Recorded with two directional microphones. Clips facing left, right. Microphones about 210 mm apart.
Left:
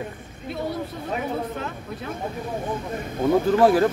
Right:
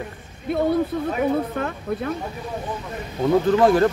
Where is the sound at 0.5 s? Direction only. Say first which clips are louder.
Right 9 dB; 55° right (ahead or behind).